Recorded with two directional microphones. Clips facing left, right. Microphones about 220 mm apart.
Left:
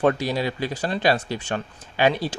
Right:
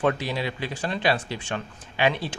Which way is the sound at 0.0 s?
40° left (ahead or behind).